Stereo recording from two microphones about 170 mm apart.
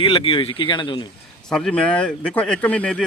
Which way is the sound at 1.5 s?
5° left (ahead or behind).